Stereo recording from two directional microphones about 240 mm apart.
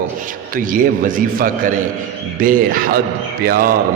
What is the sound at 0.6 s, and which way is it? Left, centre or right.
A man's voice, right.